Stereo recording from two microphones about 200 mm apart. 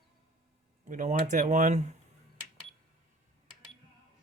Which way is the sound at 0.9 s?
40° right (ahead or behind).